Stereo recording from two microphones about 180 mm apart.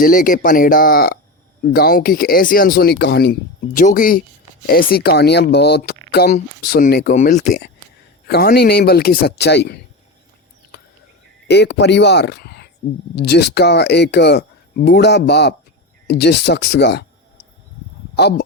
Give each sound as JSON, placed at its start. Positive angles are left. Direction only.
{"t": 0.0, "sound": "speech", "side_deg": 50}
{"t": 3.8, "sound": "speech", "side_deg": 50}
{"t": 7.2, "sound": "speech", "side_deg": 40}
{"t": 8.3, "sound": "speech", "side_deg": 60}
{"t": 11.4, "sound": "speech", "side_deg": 65}
{"t": 18.2, "sound": "speech", "side_deg": 65}